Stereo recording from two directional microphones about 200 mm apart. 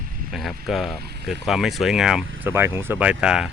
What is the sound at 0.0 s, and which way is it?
Vehicle, 45° right (ahead or behind).